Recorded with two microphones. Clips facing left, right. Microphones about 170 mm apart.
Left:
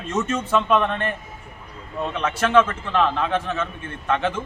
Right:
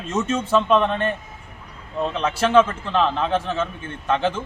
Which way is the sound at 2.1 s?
30° right (ahead or behind).